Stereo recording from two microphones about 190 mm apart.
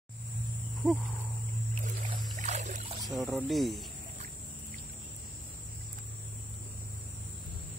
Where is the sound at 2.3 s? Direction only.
40° right (ahead or behind).